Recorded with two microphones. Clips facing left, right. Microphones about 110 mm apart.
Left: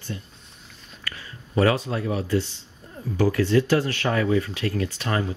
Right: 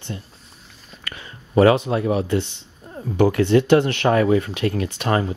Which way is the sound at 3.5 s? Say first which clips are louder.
Right 6 dB; 65° right (ahead or behind).